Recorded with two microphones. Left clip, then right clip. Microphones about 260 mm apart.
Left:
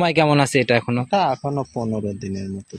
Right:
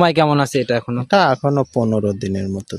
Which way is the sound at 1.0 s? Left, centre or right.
Right.